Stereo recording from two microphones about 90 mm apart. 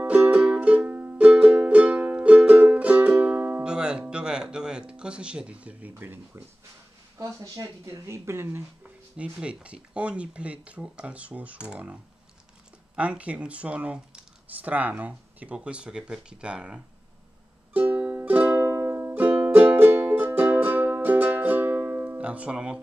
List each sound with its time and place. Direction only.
0.0 s music: 15° right (ahead or behind)
7.2 s speech: 35° right (ahead or behind)
8.8 s speech: 10° right (ahead or behind)
17.7 s music: 20° right (ahead or behind)